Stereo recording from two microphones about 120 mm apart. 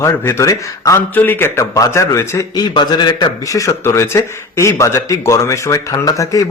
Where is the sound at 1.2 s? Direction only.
15° left (ahead or behind); by 3.3 s 40° left (ahead or behind).